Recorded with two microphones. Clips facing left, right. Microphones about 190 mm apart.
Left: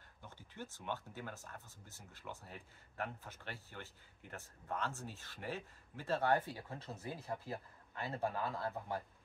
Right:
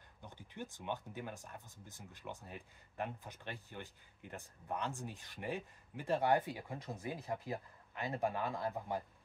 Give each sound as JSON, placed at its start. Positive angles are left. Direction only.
{"t": 0.2, "sound": "speech", "side_deg": -15}